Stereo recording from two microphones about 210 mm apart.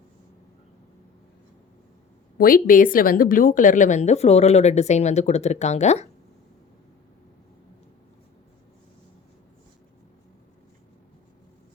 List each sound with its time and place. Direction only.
2.4 s a woman's voice: 40° left (ahead or behind)